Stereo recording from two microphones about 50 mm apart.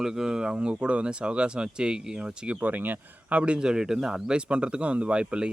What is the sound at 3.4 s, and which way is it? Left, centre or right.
Speech, centre.